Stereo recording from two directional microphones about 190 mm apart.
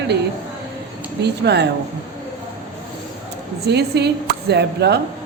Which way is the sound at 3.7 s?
60° right (ahead or behind).